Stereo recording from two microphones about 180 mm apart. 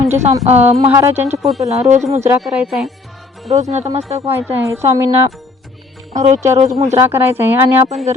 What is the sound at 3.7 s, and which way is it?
Speech, 35° right (ahead or behind).